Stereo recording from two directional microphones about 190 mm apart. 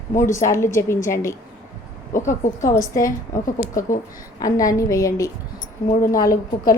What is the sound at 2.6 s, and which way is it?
Speech, 15° left (ahead or behind).